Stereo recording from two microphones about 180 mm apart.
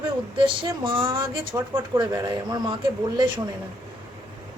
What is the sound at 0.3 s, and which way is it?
Speech, 25° right (ahead or behind).